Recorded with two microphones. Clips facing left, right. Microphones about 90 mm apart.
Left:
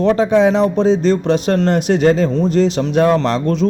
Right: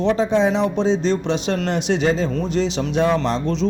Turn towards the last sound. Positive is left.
turn(degrees=50)  # may be behind; listen again after turning